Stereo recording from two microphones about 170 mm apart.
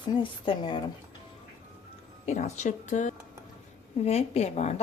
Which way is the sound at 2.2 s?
45° left (ahead or behind).